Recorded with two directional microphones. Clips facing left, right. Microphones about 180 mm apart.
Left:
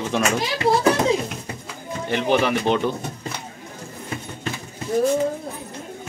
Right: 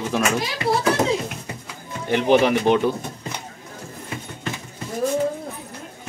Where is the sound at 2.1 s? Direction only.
15° right (ahead or behind).